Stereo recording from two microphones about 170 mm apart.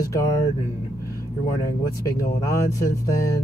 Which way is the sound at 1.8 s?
20° left (ahead or behind).